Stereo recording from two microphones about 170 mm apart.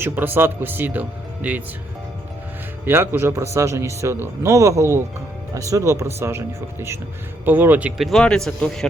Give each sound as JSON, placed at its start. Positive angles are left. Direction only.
{"t": 0.0, "sound": "speech", "side_deg": -15}
{"t": 2.8, "sound": "speech", "side_deg": -15}